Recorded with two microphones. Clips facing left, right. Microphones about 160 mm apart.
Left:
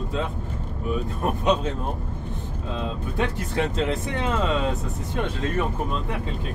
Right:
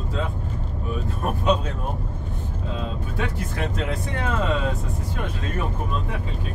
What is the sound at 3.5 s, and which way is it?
Speech, 25° left (ahead or behind).